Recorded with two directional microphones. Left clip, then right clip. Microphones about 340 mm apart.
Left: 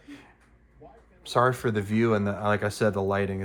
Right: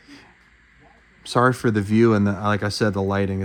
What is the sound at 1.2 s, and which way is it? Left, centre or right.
Speech, right.